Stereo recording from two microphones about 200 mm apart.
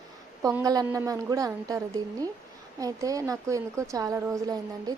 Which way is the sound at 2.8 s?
15° right (ahead or behind).